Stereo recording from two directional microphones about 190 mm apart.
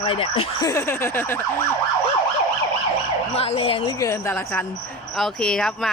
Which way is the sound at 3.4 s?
30° left (ahead or behind).